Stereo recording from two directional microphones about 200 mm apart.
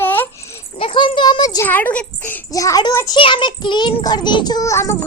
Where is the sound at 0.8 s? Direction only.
25° left (ahead or behind).